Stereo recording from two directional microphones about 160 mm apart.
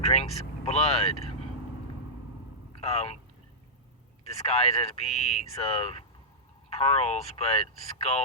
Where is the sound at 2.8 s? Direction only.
40° left (ahead or behind).